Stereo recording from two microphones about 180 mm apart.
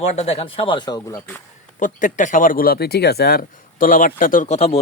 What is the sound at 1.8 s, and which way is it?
Speech, 45° left (ahead or behind).